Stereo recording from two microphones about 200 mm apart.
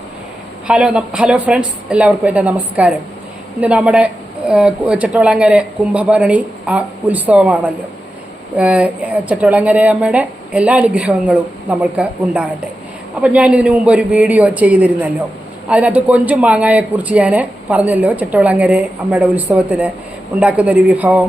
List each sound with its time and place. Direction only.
0.7 s speech: 5° right (ahead or behind)